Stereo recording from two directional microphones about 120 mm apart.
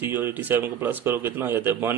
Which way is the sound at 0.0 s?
20° right (ahead or behind).